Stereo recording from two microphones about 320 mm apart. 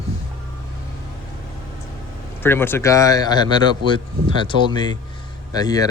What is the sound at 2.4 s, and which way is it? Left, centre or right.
Speech, centre.